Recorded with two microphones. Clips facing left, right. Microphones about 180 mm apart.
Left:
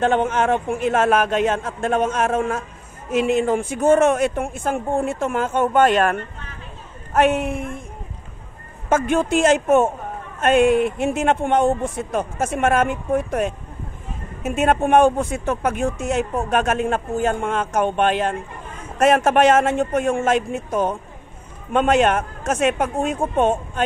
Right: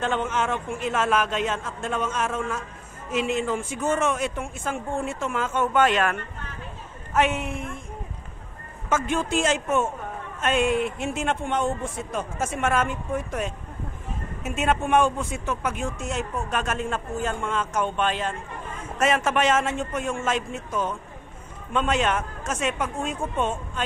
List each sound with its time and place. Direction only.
0.0 s speech: 55° left (ahead or behind)
7.2 s speech: 60° left (ahead or behind)
8.8 s speech: 60° left (ahead or behind)
14.4 s a woman's voice: 60° left (ahead or behind)
15.4 s speech: 40° left (ahead or behind)
15.7 s speech: 60° left (ahead or behind)
23.1 s speech: 45° left (ahead or behind)